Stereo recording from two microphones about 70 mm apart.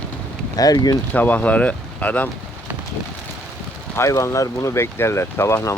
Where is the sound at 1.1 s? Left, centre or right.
Left.